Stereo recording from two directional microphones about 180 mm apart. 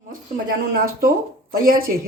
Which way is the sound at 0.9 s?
50° right (ahead or behind).